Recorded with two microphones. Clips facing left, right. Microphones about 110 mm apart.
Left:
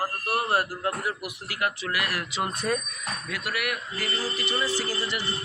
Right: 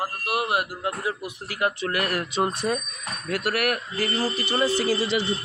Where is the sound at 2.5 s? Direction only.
25° right (ahead or behind).